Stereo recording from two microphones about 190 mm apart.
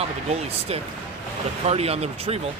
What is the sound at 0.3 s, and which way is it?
Speech, 35° right (ahead or behind).